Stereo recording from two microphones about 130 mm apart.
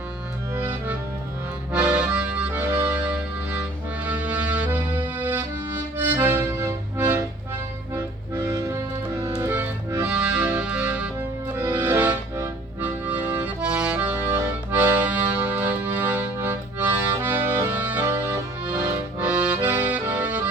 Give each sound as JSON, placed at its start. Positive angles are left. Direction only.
{"t": 0.5, "sound": "music", "side_deg": -15}
{"t": 1.7, "sound": "accordion", "side_deg": -10}
{"t": 4.0, "sound": "music", "side_deg": -10}
{"t": 8.4, "sound": "accordion", "side_deg": -25}
{"t": 10.1, "sound": "music", "side_deg": -10}
{"t": 14.7, "sound": "accordion", "side_deg": -15}